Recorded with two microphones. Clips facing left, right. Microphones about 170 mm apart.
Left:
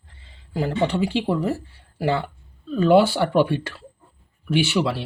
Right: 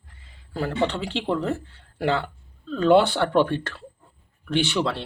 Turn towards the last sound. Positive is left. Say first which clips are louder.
# left 2 dB
turn(degrees=5)  # may be behind; listen again after turning